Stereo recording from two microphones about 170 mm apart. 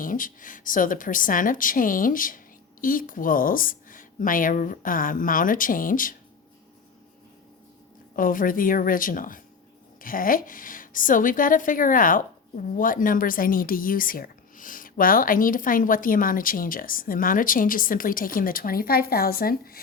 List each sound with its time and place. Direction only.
0.0 s a woman's voice: 55° left (ahead or behind)
8.1 s a woman's voice: 55° left (ahead or behind)